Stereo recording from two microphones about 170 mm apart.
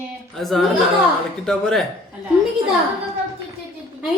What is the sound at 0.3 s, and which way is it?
A woman's voice, centre (ahead or behind).